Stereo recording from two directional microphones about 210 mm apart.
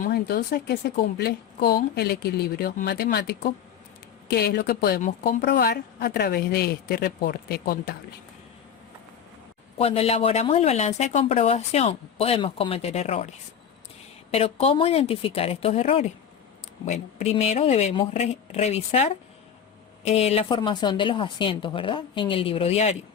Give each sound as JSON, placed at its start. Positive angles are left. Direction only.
{"t": 0.0, "sound": "a woman's voice", "side_deg": 45}
{"t": 9.7, "sound": "speech", "side_deg": 30}